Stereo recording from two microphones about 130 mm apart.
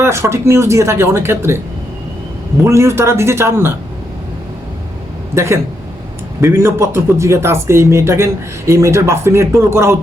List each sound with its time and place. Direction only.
0.0 s speech: 20° right (ahead or behind)
2.6 s speech: 20° right (ahead or behind)
5.3 s a man's voice: 20° right (ahead or behind)